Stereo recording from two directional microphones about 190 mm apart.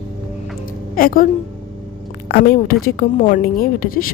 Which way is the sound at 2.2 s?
55° left (ahead or behind).